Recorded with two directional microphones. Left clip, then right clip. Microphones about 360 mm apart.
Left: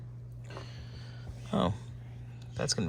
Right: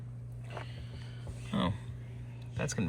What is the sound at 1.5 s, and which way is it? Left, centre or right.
Speech, centre.